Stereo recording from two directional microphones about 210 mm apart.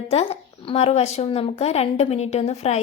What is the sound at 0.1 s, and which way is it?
Speech, 25° left (ahead or behind).